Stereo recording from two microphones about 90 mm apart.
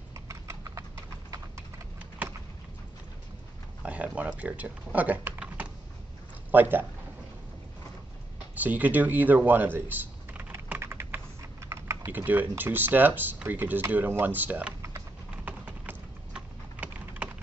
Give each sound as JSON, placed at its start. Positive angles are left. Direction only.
{"t": 0.1, "sound": "clip-clop", "side_deg": -35}
{"t": 3.8, "sound": "speech", "side_deg": -15}
{"t": 6.5, "sound": "speech", "side_deg": -20}
{"t": 8.5, "sound": "typing", "side_deg": -20}
{"t": 12.1, "sound": "speech", "side_deg": -20}
{"t": 14.8, "sound": "typing", "side_deg": -35}
{"t": 15.3, "sound": "typing", "side_deg": -15}